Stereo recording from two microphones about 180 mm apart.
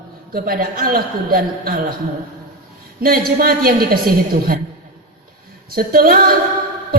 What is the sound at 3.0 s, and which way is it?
Speech, 55° right (ahead or behind).